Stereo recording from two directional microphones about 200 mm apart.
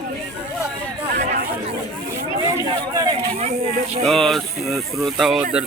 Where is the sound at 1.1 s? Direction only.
40° right (ahead or behind).